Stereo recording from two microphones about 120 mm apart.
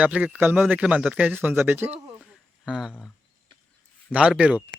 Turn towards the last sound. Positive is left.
turn(degrees=-10)  # may be behind; listen again after turning